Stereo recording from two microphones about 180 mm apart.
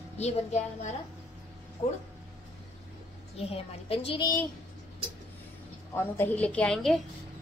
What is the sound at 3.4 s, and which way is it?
Speech, 35° left (ahead or behind).